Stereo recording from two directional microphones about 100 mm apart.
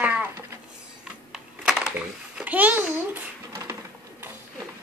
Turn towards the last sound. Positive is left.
turn(degrees=-25)  # may be behind; listen again after turning